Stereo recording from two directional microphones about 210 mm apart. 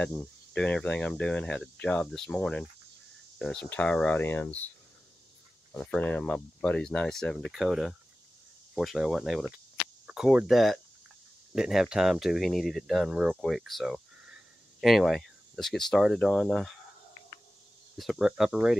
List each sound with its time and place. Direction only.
0.0 s speech: 5° left (ahead or behind)
5.7 s speech: 5° left (ahead or behind)
17.9 s speech: centre (ahead or behind)